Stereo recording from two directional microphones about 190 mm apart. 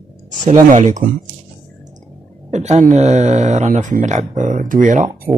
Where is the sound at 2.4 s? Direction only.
40° right (ahead or behind).